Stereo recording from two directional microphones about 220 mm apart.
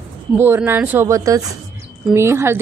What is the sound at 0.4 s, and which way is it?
Speech, 10° right (ahead or behind).